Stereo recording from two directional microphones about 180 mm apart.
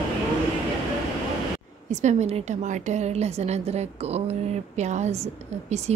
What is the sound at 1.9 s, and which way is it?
A woman's voice, 40° right (ahead or behind).